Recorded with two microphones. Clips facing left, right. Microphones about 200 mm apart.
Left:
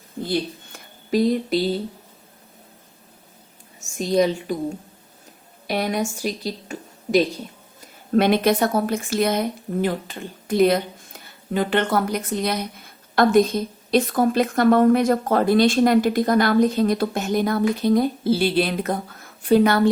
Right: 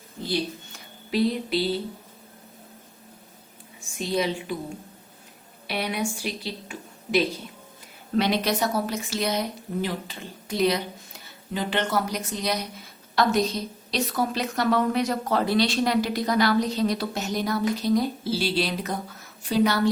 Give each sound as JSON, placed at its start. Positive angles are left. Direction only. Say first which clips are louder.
{"t": 0.2, "sound": "a woman's voice", "louder": "left 3 dB", "side_deg": 50}
{"t": 3.8, "sound": "a woman's voice", "louder": "left 7 dB", "side_deg": 45}
{"t": 5.6, "sound": "a woman's voice", "louder": "left 5 dB", "side_deg": 45}